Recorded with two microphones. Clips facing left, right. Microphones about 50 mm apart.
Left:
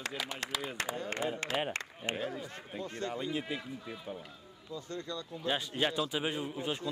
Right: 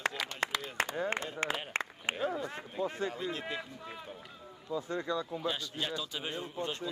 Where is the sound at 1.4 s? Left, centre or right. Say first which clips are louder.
Right 2 dB; right.